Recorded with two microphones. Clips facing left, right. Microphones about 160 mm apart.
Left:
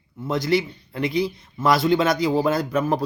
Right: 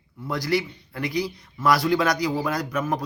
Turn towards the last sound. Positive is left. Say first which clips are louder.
# left 4 dB
turn(degrees=30)  # may be behind; listen again after turning